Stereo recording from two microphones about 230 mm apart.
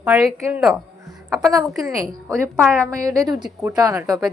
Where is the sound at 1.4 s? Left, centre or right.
Centre.